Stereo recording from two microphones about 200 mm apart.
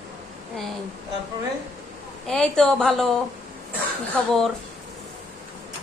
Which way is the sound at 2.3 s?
5° left (ahead or behind).